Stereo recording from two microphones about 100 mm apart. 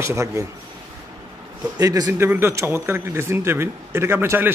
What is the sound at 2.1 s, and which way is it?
A man's voice, 25° right (ahead or behind).